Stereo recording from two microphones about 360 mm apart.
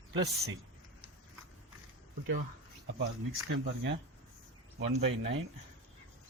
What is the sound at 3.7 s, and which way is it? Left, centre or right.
Speech, right.